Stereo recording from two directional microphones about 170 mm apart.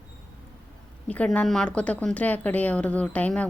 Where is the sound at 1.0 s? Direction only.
5° left (ahead or behind).